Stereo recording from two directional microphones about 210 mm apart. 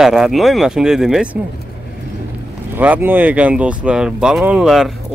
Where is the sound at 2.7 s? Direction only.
10° right (ahead or behind).